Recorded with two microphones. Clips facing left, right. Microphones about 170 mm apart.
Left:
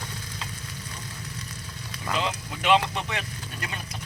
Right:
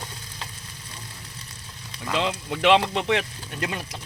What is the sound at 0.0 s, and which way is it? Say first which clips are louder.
Stir: left 1 dB; 30° right (ahead or behind).